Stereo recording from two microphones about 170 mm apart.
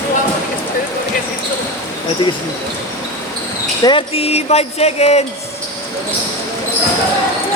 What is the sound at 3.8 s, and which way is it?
Speech, 30° left (ahead or behind).